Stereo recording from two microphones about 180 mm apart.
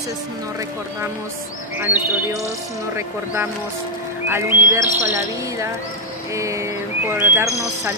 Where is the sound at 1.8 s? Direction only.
10° right (ahead or behind).